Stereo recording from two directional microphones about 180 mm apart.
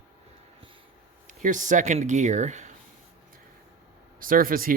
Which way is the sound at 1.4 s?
45° right (ahead or behind).